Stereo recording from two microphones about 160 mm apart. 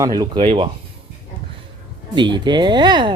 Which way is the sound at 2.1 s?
30° right (ahead or behind).